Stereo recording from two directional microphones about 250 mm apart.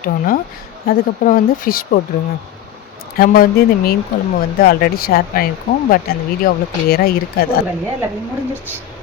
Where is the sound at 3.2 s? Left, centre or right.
Left.